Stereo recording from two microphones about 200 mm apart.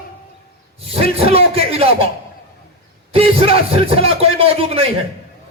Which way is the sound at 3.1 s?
30° right (ahead or behind).